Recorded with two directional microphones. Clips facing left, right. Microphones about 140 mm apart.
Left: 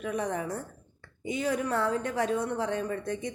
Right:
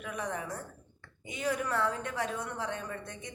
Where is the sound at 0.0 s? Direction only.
35° left (ahead or behind).